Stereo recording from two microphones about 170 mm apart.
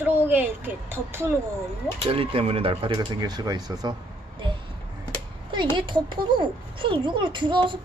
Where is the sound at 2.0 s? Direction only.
35° right (ahead or behind).